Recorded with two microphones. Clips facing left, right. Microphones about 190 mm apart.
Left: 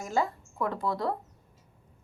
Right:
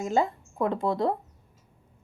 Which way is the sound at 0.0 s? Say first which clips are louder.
Right 4 dB; 20° right (ahead or behind).